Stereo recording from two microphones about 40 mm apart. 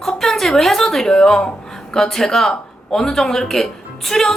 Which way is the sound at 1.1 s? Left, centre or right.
Centre.